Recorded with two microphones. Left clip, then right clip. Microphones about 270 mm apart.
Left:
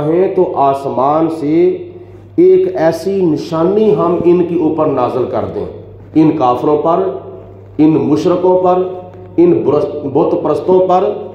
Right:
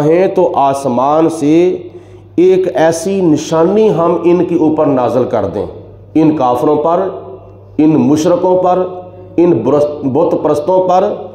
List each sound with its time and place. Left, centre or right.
0.0 s a man's voice: right